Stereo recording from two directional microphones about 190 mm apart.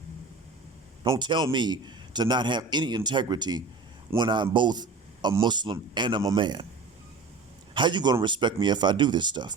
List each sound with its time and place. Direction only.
1.0 s a man's voice: 20° right (ahead or behind)
7.7 s a man's voice: 25° right (ahead or behind)